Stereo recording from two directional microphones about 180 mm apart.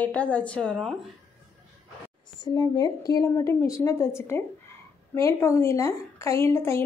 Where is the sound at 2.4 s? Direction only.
20° left (ahead or behind).